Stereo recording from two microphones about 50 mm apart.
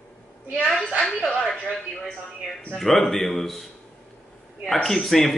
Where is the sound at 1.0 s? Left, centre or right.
Left.